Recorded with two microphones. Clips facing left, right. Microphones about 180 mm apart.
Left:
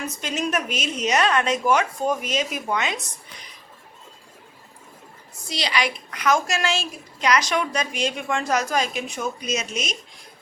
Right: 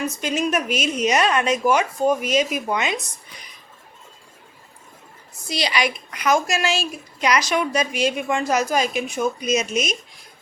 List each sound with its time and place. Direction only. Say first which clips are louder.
0.2 s a woman's voice: right 2 dB; 10° right (ahead or behind)
5.5 s a woman's voice: right 2 dB; 10° right (ahead or behind)